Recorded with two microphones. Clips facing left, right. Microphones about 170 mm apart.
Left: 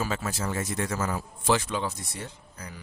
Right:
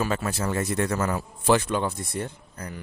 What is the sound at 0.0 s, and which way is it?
A man's voice, 65° right (ahead or behind).